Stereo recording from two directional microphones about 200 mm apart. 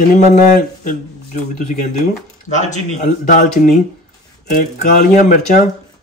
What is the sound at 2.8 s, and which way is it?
Speech, 35° left (ahead or behind).